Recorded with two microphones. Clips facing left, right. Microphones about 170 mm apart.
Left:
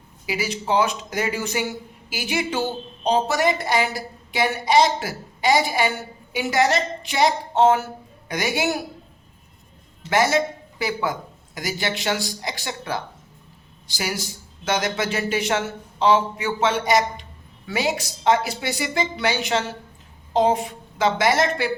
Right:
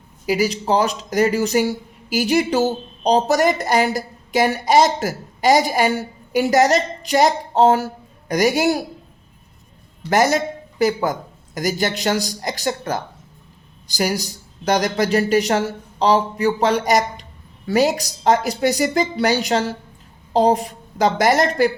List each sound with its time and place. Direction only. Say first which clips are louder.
0.3 s speech: right 6 dB; 40° right (ahead or behind)
10.1 s speech: right 3 dB; 40° right (ahead or behind)